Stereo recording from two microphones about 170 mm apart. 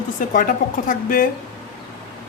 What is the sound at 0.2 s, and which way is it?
Speech, 50° left (ahead or behind).